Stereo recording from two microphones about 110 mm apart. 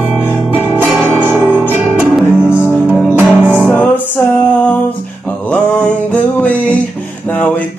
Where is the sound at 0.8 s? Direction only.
10° right (ahead or behind).